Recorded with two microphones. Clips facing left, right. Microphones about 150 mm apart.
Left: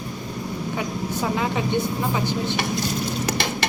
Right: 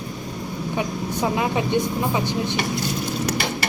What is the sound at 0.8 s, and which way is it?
Speech, 15° right (ahead or behind).